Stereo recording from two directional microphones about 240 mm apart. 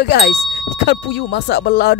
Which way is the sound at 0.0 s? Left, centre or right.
Left.